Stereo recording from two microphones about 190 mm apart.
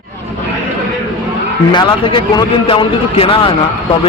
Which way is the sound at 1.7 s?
25° left (ahead or behind).